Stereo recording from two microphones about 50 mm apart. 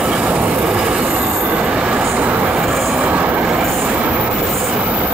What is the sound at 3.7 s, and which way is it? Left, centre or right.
Train, right.